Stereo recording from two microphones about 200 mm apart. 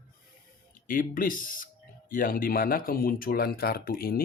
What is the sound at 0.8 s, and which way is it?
Speech, 45° left (ahead or behind).